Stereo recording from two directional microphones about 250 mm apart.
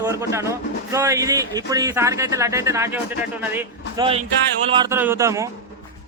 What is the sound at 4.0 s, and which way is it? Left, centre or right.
Speech, centre.